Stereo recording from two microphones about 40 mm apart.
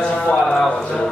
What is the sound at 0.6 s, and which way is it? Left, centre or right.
Speech, centre.